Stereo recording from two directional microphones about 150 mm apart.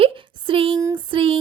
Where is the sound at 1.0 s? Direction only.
35° right (ahead or behind).